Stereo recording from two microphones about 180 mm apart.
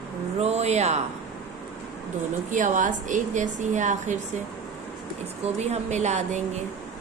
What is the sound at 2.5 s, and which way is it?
A woman's voice, 45° right (ahead or behind).